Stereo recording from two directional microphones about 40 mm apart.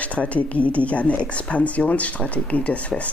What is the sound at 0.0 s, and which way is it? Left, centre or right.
Speech, left.